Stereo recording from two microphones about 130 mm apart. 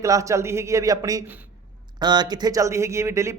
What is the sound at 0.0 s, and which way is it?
Speech, 25° right (ahead or behind).